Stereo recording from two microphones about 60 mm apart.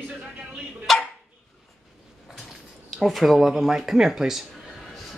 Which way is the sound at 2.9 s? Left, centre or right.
Centre.